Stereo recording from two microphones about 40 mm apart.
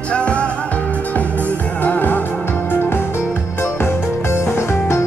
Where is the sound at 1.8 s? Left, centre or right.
Left.